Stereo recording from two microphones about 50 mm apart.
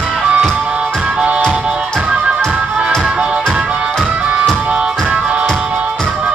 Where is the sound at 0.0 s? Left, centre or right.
Centre.